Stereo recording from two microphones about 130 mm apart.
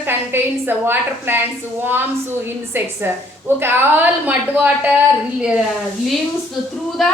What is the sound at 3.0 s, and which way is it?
A woman's voice, 15° right (ahead or behind).